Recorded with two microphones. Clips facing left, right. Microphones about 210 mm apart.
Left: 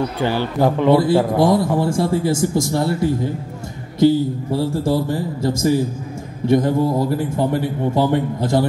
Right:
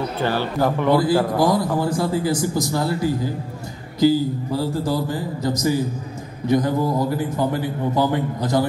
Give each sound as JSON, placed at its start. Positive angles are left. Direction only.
{"t": 0.2, "sound": "a man's voice", "side_deg": 15}